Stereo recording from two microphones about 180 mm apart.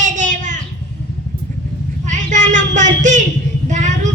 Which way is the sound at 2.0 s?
45° right (ahead or behind).